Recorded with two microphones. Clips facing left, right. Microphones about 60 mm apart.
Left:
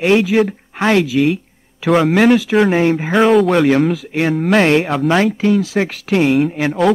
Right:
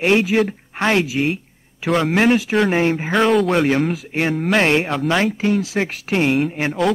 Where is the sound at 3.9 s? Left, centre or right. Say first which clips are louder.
Left 3 dB; left.